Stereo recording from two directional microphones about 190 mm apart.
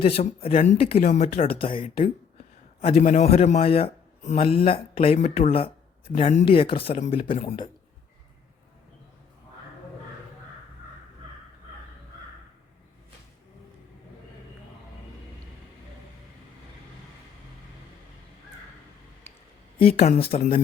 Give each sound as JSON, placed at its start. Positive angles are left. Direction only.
{"t": 0.2, "sound": "a man's voice", "side_deg": 30}
{"t": 2.9, "sound": "a man's voice", "side_deg": 45}
{"t": 19.8, "sound": "a man's voice", "side_deg": 35}